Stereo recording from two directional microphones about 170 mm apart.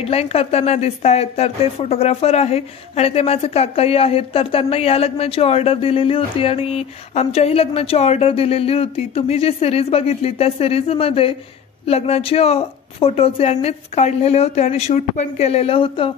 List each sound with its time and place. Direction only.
0.0 s speech: 35° left (ahead or behind)